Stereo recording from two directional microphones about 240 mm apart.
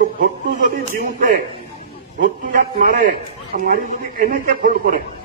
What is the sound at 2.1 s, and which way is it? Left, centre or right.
A man's voice, right.